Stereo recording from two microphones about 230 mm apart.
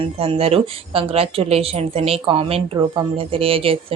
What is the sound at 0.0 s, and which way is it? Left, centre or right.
Speech, right.